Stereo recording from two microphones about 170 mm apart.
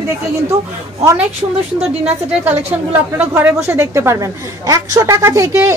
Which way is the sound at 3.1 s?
10° right (ahead or behind).